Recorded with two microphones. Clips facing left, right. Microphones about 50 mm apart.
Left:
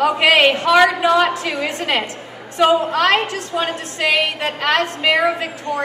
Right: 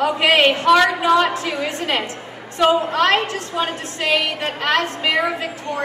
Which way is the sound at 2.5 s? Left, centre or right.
Centre.